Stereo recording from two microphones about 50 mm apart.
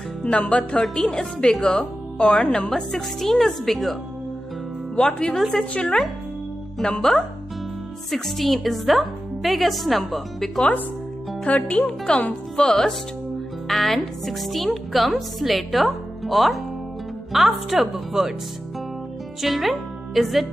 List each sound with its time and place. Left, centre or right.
0.2 s speech: left
0.8 s speech: centre
2.7 s a woman's voice: centre
4.9 s speech: centre
6.8 s a woman's voice: centre
11.4 s a woman's voice: left; by 18.3 s centre
19.4 s speech: centre